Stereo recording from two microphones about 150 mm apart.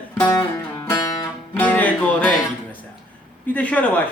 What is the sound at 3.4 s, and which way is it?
Speech, 10° left (ahead or behind).